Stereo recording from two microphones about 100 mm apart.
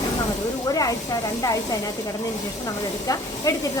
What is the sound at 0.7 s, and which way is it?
Speech, 35° left (ahead or behind).